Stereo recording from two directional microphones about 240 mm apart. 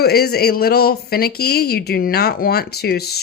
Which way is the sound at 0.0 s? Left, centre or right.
Left.